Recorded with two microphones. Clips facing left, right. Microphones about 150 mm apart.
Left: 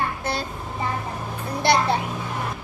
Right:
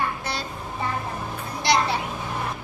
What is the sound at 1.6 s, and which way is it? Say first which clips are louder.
Speech: left 2 dB; 55° left (ahead or behind).